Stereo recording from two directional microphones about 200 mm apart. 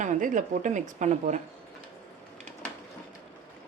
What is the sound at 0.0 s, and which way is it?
Speech, 40° right (ahead or behind).